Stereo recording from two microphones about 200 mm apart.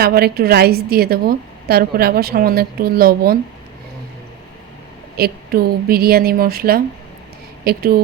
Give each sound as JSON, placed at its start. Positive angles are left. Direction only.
{"t": 0.0, "sound": "a woman's voice", "side_deg": -50}
{"t": 5.1, "sound": "a woman's voice", "side_deg": -50}